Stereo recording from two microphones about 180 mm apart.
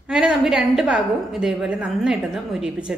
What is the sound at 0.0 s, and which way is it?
A woman's voice, 5° right (ahead or behind).